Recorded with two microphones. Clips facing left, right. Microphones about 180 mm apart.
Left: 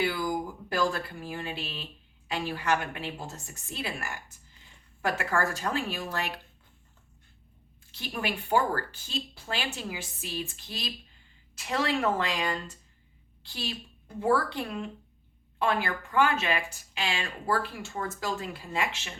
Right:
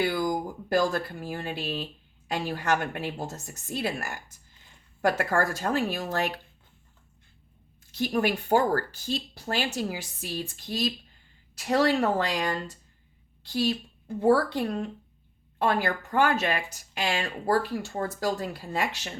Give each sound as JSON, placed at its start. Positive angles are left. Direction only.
{"t": 0.0, "sound": "speech", "side_deg": -40}
{"t": 7.9, "sound": "a woman's voice", "side_deg": -45}